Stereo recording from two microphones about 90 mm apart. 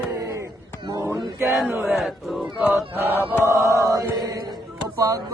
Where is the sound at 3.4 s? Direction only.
35° right (ahead or behind).